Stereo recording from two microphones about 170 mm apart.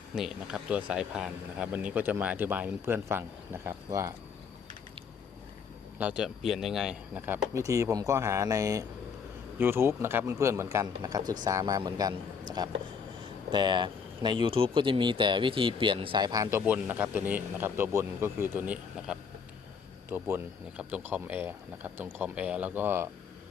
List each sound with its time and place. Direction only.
0.2 s speech: 5° right (ahead or behind)
6.0 s speech: 5° right (ahead or behind)